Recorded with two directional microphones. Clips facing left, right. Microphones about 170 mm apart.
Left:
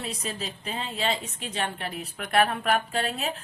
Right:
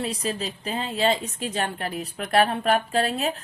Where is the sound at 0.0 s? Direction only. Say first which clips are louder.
Right 6 dB; 35° right (ahead or behind).